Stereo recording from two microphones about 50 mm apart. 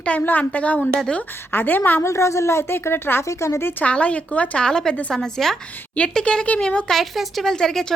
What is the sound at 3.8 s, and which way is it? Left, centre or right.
Speech, left.